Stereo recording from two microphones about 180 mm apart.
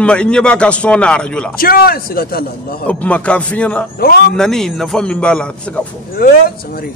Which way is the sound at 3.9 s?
55° left (ahead or behind).